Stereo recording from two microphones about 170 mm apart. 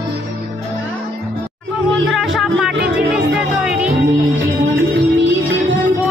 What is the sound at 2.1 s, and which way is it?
Music, centre (ahead or behind).